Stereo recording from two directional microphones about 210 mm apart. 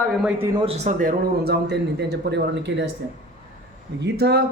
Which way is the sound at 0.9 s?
45° right (ahead or behind).